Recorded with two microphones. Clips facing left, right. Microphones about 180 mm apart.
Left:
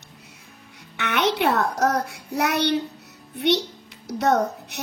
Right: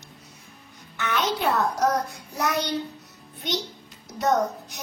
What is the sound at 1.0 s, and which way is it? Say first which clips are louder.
A child's voice: left 4 dB; 70° left (ahead or behind).